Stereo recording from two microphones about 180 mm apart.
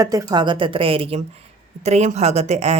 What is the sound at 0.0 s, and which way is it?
Speech, 20° right (ahead or behind).